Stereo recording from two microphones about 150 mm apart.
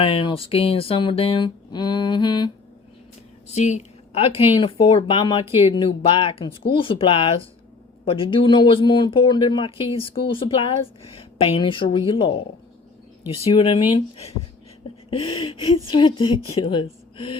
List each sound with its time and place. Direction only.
0.0 s speech: 35° left (ahead or behind)
3.5 s speech: 50° left (ahead or behind)
13.5 s speech: 35° left (ahead or behind)